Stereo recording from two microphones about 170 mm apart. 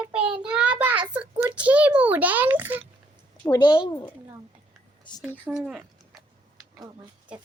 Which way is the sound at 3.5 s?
25° left (ahead or behind).